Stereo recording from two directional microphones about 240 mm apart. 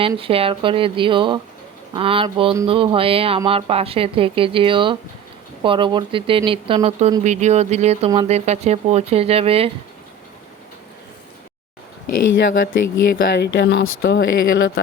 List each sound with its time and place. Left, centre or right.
0.0 s speech: right
12.0 s speech: left
13.3 s speech: left